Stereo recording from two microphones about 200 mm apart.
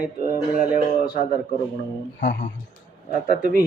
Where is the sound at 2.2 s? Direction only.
45° left (ahead or behind).